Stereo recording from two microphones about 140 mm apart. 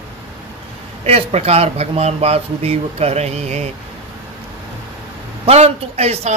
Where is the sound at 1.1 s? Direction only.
45° right (ahead or behind).